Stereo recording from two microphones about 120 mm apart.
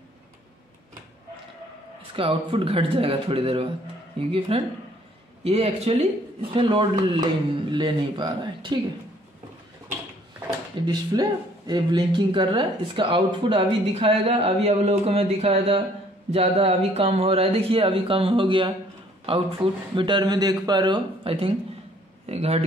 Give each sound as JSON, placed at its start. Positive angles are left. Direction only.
{"t": 2.1, "sound": "a man's voice", "side_deg": -50}
{"t": 6.5, "sound": "speech", "side_deg": -45}
{"t": 10.9, "sound": "speech", "side_deg": -35}
{"t": 22.2, "sound": "speech", "side_deg": -60}